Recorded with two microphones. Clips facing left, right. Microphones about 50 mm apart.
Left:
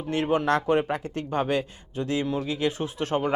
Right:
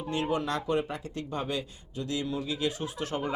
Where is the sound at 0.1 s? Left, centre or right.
Left.